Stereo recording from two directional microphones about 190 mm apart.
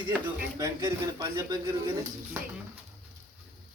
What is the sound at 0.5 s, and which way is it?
A man's voice, 15° right (ahead or behind).